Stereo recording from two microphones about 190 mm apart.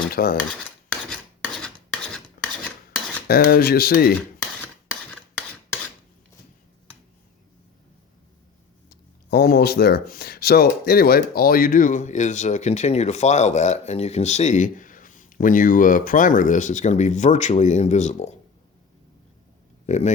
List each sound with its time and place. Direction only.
0.2 s speech: 50° left (ahead or behind)
1.1 s filing: 5° left (ahead or behind)
3.2 s speech: 50° left (ahead or behind)
8.9 s speech: 55° left (ahead or behind); by 18.3 s 35° left (ahead or behind)
19.9 s speech: 35° left (ahead or behind)